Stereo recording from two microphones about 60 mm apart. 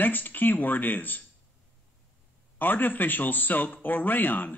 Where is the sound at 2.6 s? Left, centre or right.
Left.